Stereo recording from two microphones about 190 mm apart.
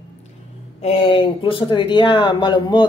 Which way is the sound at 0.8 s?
30° left (ahead or behind).